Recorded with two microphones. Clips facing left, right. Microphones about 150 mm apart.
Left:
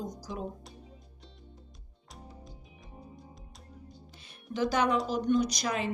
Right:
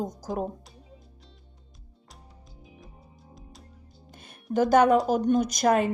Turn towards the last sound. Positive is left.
turn(degrees=-50)  # may be behind; listen again after turning